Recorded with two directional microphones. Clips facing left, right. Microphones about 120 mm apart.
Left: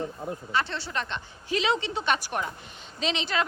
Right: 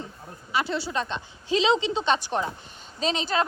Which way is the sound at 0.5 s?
10° right (ahead or behind).